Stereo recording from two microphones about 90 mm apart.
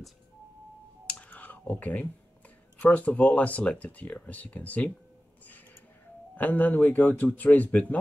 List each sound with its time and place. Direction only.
1.0 s clicking: 15° left (ahead or behind)
2.8 s speech: 15° left (ahead or behind)
6.3 s speech: 20° left (ahead or behind)